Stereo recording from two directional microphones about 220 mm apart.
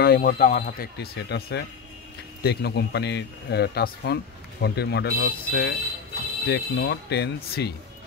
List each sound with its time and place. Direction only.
0.0 s speech: 45° left (ahead or behind)